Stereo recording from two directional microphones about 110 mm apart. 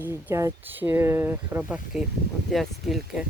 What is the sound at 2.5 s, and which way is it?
Speech, centre (ahead or behind).